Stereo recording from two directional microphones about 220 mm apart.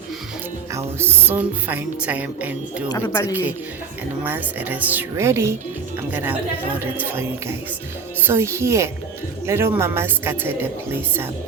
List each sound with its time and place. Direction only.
0.7 s a woman's voice: 10° right (ahead or behind)
2.9 s speech: 15° left (ahead or behind)
4.2 s a woman's voice: 10° right (ahead or behind)